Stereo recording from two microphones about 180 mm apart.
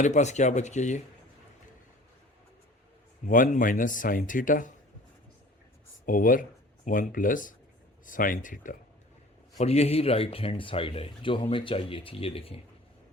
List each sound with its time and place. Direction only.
0.0 s speech: 40° left (ahead or behind)
3.2 s speech: 50° left (ahead or behind)
6.1 s speech: 50° left (ahead or behind)
9.6 s speech: 35° left (ahead or behind)